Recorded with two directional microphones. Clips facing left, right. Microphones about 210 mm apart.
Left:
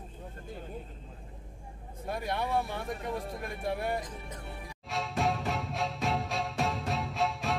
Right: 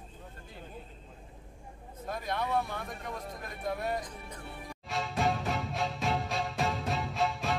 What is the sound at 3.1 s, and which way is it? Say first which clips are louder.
Speech: left 5 dB; 30° left (ahead or behind).